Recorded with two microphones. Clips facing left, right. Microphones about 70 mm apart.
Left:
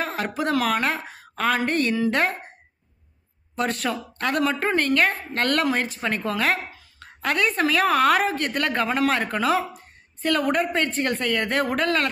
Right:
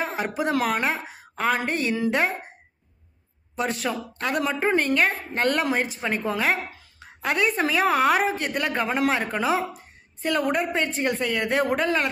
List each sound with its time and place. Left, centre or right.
0.0 s a woman's voice: centre
3.5 s a woman's voice: centre